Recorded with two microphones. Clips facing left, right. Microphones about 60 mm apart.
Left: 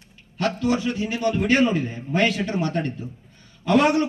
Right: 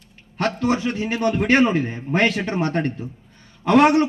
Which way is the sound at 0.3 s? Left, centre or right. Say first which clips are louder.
Right 1 dB; right.